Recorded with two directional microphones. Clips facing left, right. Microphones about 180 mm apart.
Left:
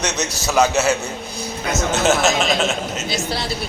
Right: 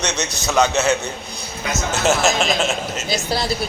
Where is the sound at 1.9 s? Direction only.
Centre (ahead or behind).